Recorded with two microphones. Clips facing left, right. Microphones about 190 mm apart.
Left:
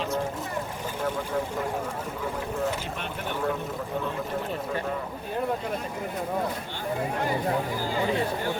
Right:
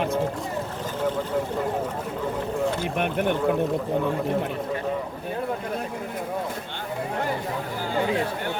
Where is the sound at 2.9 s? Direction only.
60° right (ahead or behind).